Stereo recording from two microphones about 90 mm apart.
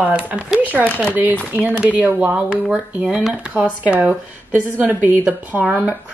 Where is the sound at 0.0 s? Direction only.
15° right (ahead or behind).